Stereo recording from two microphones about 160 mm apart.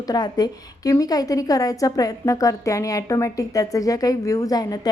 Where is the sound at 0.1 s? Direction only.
25° left (ahead or behind).